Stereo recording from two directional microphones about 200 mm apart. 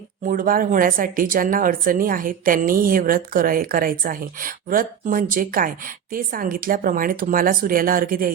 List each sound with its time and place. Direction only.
0.3 s speech: 45° right (ahead or behind)